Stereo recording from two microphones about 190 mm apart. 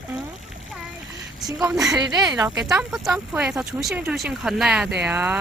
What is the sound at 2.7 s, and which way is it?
Speech, 5° right (ahead or behind).